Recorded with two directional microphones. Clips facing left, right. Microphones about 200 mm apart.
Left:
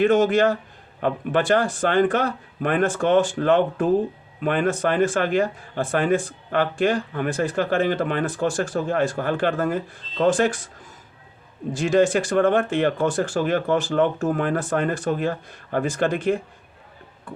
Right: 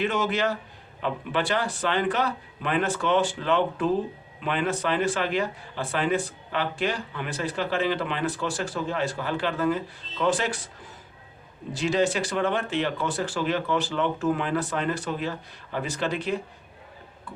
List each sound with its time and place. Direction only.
0.0 s a man's voice: 50° left (ahead or behind)
11.7 s a man's voice: 50° left (ahead or behind)